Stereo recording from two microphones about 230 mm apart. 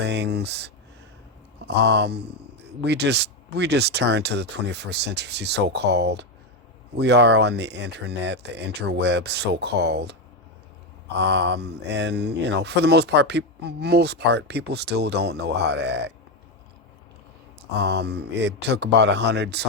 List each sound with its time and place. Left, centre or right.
0.0 s a sound: right
1.6 s speech: right
17.6 s speech: right